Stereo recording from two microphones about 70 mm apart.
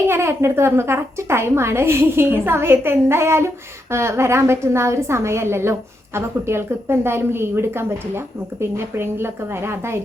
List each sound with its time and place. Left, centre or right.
0.1 s a woman's voice: right